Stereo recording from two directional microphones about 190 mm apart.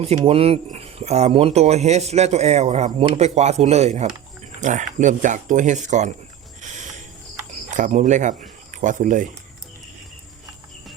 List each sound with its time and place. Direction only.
0.0 s speech: 30° right (ahead or behind)
6.6 s a sound: 40° right (ahead or behind)
7.7 s speech: 40° right (ahead or behind)